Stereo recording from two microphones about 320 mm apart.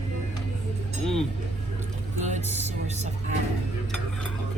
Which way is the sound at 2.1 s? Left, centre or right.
Right.